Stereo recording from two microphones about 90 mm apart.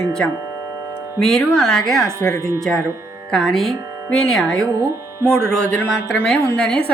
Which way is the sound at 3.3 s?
5° left (ahead or behind).